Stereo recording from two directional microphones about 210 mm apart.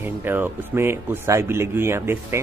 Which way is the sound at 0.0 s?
10° right (ahead or behind).